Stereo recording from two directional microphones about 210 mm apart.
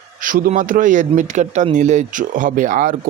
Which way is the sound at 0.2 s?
40° right (ahead or behind).